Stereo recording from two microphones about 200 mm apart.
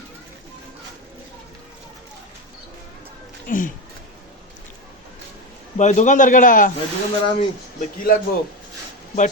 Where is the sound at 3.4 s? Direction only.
40° left (ahead or behind).